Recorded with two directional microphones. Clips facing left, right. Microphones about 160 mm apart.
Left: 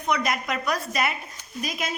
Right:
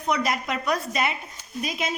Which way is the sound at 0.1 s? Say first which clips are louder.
Even; 30° right (ahead or behind).